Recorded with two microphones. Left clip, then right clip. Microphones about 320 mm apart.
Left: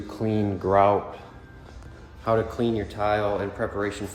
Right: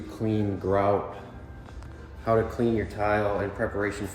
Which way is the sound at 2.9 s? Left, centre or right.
Centre.